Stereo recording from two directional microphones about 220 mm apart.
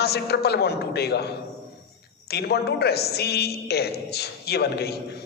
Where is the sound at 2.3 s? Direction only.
50° left (ahead or behind).